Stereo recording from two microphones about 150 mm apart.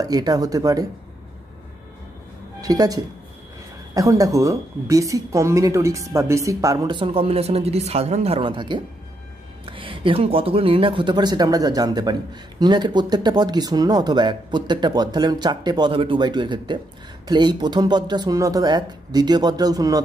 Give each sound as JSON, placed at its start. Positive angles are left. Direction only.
{"t": 0.0, "sound": "speech", "side_deg": -25}
{"t": 2.6, "sound": "speech", "side_deg": -25}